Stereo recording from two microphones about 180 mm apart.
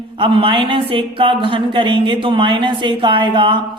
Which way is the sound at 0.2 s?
30° right (ahead or behind).